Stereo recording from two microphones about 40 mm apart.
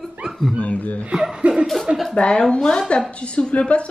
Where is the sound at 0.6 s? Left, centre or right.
Left.